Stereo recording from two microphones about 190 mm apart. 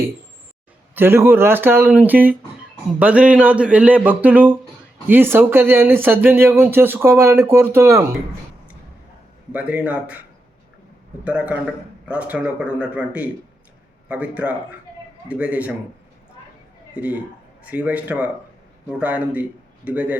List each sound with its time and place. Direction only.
0.9 s speech: 10° right (ahead or behind)
9.5 s speech: 5° right (ahead or behind)
11.2 s speech: 5° right (ahead or behind)
16.9 s a man's voice: 5° right (ahead or behind)